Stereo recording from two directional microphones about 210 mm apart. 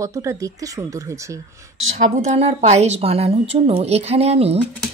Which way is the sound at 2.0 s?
30° right (ahead or behind).